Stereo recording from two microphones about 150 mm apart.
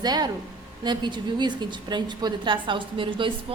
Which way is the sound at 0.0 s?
25° right (ahead or behind).